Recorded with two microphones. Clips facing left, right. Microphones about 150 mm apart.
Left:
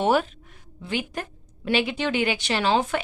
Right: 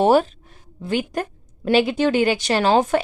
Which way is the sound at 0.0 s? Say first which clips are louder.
Right 6 dB; 35° right (ahead or behind).